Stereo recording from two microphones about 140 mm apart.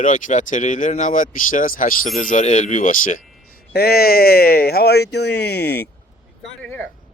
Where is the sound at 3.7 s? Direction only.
90° left.